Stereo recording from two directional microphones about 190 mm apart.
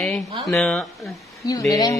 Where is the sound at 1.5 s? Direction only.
20° left (ahead or behind).